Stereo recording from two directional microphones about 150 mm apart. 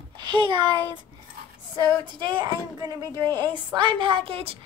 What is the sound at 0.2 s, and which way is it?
Speech, 30° right (ahead or behind).